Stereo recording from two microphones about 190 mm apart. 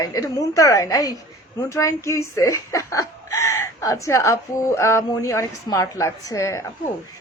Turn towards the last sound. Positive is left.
turn(degrees=15)  # may be behind; listen again after turning